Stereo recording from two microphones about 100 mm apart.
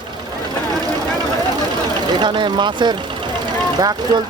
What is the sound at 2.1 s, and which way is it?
Speech, 50° right (ahead or behind).